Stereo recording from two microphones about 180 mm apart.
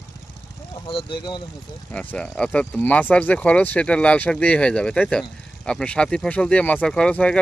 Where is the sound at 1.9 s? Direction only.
5° left (ahead or behind).